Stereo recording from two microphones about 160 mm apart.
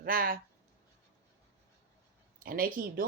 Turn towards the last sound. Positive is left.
turn(degrees=-65)  # may be behind; listen again after turning